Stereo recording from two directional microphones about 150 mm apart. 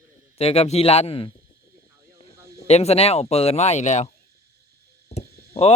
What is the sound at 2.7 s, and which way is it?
Speech, 45° left (ahead or behind).